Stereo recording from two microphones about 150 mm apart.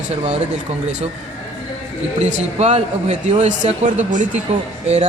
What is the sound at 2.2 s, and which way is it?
Speech, 50° right (ahead or behind).